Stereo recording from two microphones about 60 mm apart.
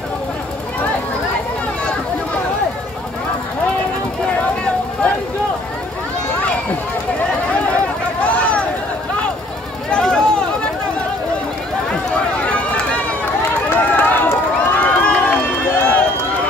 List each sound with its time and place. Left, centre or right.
7.6 s a sound: left
9.8 s run: centre
12.4 s run: left